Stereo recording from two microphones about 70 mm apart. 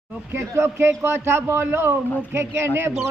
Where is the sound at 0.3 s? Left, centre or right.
Right.